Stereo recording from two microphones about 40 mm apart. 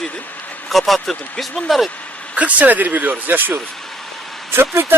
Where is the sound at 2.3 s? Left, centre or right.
Right.